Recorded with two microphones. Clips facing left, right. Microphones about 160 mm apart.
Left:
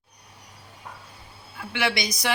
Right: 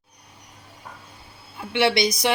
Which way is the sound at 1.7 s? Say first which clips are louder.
Right 7 dB; 25° right (ahead or behind).